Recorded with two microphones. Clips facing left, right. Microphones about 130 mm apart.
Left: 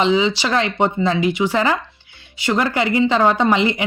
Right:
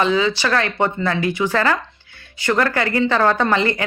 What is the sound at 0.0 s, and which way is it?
A woman's voice, 20° left (ahead or behind).